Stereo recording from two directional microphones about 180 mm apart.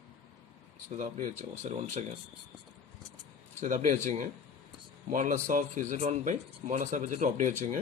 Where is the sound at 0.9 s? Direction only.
40° right (ahead or behind).